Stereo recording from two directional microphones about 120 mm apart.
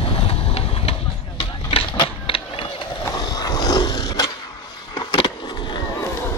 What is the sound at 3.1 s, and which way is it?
Vehicle, 35° left (ahead or behind).